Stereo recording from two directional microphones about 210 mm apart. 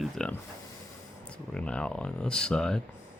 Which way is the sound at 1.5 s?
5° left (ahead or behind).